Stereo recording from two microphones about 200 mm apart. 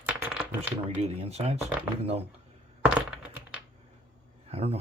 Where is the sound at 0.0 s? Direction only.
10° right (ahead or behind).